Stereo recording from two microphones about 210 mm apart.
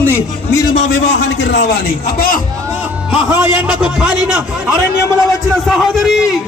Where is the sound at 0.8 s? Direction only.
60° left (ahead or behind).